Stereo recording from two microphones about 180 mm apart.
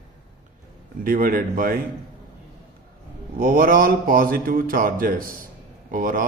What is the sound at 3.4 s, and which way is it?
Speech, 55° right (ahead or behind).